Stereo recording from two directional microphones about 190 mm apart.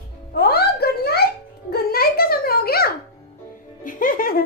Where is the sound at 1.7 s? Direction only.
55° left (ahead or behind).